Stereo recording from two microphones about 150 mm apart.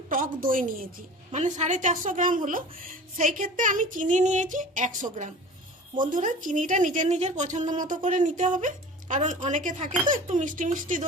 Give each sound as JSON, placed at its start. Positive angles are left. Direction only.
{"t": 0.1, "sound": "a woman's voice", "side_deg": -65}
{"t": 1.3, "sound": "a woman's voice", "side_deg": -50}